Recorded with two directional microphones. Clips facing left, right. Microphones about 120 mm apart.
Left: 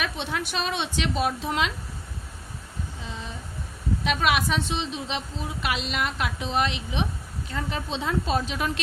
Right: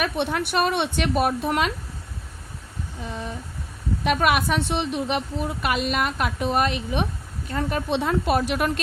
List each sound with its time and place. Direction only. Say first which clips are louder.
0.0 s a woman's voice: right 5 dB; 55° right (ahead or behind)
4.0 s a woman's voice: right 4 dB; 50° right (ahead or behind)